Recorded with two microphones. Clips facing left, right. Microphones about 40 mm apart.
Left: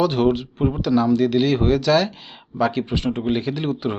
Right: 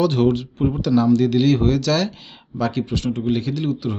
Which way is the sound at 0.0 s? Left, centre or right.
Centre.